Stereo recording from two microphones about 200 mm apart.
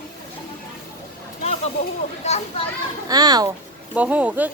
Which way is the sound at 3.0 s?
20° right (ahead or behind).